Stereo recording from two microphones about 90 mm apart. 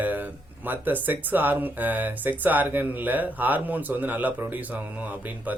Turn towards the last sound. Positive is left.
turn(degrees=-20)  # may be behind; listen again after turning